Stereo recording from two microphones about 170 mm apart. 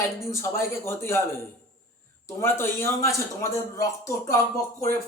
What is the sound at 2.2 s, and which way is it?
A man's voice, 15° left (ahead or behind).